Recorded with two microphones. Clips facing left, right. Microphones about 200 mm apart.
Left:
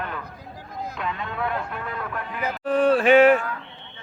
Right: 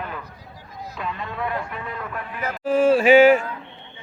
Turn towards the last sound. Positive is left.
turn(degrees=0)  # may be behind; listen again after turning